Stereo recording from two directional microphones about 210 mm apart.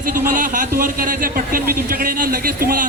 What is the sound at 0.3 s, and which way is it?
Speech, 40° right (ahead or behind).